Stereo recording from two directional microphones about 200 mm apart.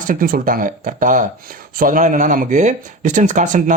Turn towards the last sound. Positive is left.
turn(degrees=-40)  # may be behind; listen again after turning